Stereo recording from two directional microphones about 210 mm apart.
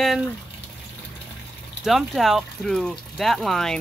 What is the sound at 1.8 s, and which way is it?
Speech, centre (ahead or behind).